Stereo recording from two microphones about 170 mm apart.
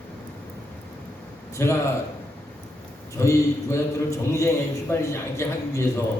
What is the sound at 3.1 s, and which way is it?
A man's voice, 15° left (ahead or behind).